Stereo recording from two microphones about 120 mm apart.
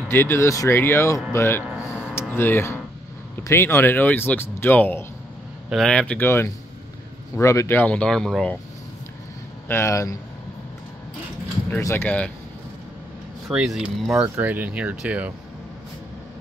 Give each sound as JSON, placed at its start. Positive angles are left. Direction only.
{"t": 0.1, "sound": "speech", "side_deg": 20}
{"t": 1.8, "sound": "a sound", "side_deg": 20}
{"t": 3.4, "sound": "speech", "side_deg": 20}
{"t": 5.7, "sound": "speech", "side_deg": 5}
{"t": 6.2, "sound": "speech", "side_deg": 20}
{"t": 9.7, "sound": "speech", "side_deg": 25}
{"t": 11.8, "sound": "speech", "side_deg": 15}
{"t": 13.5, "sound": "speech", "side_deg": -5}
{"t": 14.2, "sound": "speech", "side_deg": -15}